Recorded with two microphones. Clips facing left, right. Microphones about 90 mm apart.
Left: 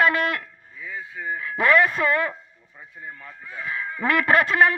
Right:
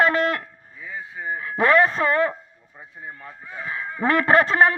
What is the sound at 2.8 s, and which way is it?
Speech, 20° right (ahead or behind).